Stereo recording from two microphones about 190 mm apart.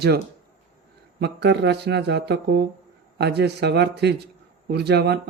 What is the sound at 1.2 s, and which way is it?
Speech, 65° right (ahead or behind).